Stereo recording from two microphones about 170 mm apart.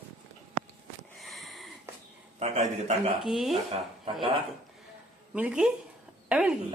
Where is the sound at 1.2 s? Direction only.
Centre (ahead or behind).